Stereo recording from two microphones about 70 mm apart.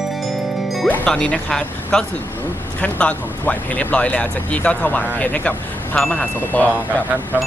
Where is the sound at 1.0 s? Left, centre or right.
Centre.